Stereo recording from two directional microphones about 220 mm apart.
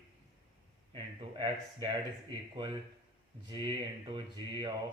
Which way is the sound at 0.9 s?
25° right (ahead or behind).